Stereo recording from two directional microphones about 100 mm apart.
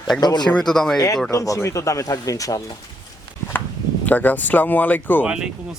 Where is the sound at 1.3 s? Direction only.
35° left (ahead or behind).